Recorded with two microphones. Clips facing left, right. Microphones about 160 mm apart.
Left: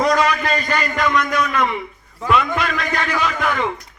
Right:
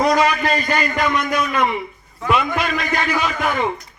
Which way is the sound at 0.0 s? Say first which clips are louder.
Right 1 dB; 10° right (ahead or behind).